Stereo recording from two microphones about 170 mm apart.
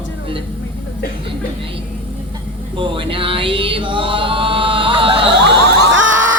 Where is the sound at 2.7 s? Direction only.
30° right (ahead or behind).